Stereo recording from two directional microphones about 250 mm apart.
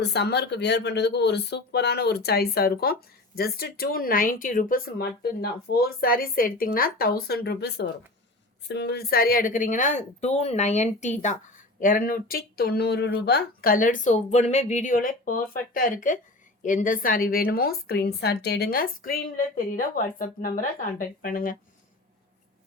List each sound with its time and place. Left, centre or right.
0.0 s a woman's voice: left